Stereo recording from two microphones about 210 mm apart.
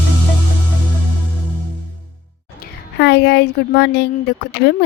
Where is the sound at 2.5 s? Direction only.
55° left (ahead or behind).